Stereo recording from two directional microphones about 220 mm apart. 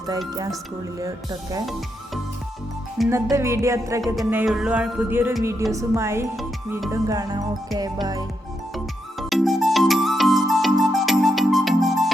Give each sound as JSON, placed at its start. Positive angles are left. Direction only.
{"t": 0.9, "sound": "music", "side_deg": -15}
{"t": 3.1, "sound": "music", "side_deg": -15}
{"t": 4.0, "sound": "speech", "side_deg": 0}
{"t": 5.7, "sound": "music", "side_deg": -10}
{"t": 6.3, "sound": "speech", "side_deg": 0}
{"t": 6.9, "sound": "music", "side_deg": -15}
{"t": 8.7, "sound": "music", "side_deg": 0}